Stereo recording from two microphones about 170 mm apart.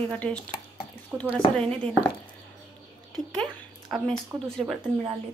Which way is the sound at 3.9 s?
Centre (ahead or behind).